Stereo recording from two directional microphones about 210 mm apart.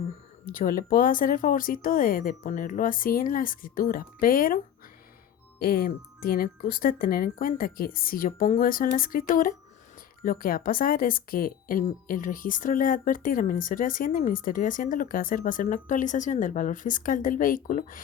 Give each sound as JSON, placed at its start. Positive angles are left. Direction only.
{"t": 0.5, "sound": "a woman's voice", "side_deg": 40}